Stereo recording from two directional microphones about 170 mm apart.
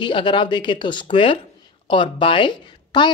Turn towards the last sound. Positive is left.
turn(degrees=30)  # may be behind; listen again after turning